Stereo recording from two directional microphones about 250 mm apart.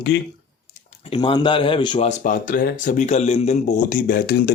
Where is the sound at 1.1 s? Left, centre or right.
Centre.